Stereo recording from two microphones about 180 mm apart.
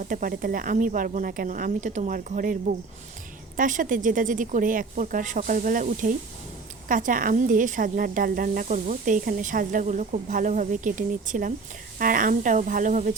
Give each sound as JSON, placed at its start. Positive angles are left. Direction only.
{"t": 0.1, "sound": "speech", "side_deg": -50}